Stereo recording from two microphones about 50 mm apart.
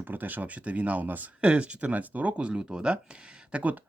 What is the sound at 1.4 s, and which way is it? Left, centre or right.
Speech, right.